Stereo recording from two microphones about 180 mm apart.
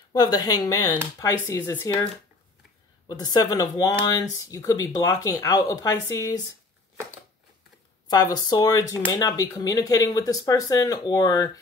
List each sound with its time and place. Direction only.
0.1 s speech: 20° left (ahead or behind)
3.1 s speech: 20° left (ahead or behind)
8.1 s speech: 20° left (ahead or behind)